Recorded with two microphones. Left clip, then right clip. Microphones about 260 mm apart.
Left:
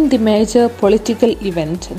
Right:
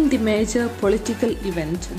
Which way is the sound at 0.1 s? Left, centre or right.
Left.